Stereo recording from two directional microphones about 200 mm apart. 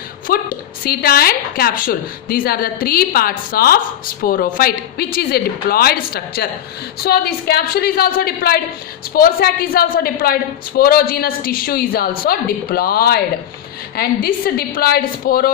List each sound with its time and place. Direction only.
0.3 s a woman's voice: 50° left (ahead or behind)